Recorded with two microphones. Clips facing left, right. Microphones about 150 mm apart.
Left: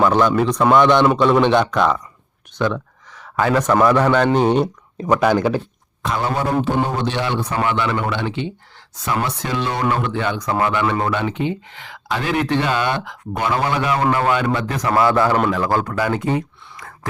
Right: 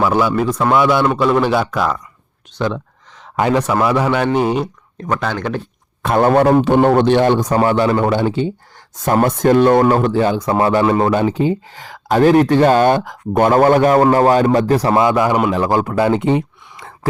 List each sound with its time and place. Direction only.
0.0 s a man's voice: 5° right (ahead or behind)
5.0 s speech: 10° left (ahead or behind)
6.0 s a man's voice: 55° right (ahead or behind); by 15.0 s 30° right (ahead or behind)
15.0 s a man's voice: 15° right (ahead or behind)